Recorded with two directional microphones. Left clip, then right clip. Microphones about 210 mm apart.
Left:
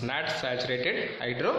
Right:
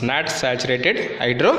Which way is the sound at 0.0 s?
40° right (ahead or behind).